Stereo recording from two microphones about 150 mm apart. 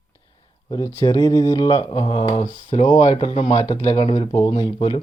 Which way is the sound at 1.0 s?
25° left (ahead or behind).